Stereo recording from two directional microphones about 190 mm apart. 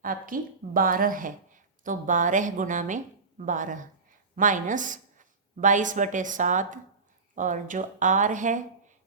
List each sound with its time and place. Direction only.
0.0 s a woman's voice: 45° right (ahead or behind)